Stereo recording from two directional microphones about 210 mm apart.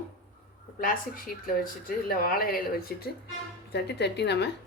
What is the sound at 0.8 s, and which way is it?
A woman's voice, 40° left (ahead or behind).